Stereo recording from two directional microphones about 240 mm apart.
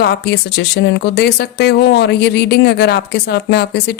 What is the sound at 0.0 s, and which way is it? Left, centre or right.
Speech, left.